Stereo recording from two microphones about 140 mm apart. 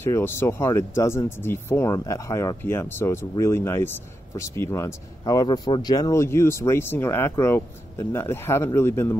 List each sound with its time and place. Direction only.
0.0 s speech: 15° left (ahead or behind)